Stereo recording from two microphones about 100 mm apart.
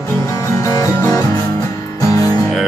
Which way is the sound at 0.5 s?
35° left (ahead or behind).